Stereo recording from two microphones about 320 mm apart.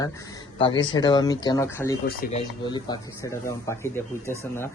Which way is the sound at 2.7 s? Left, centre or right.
Centre.